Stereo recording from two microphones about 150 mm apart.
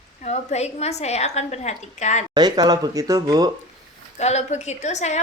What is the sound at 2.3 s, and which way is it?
Speech, 25° right (ahead or behind).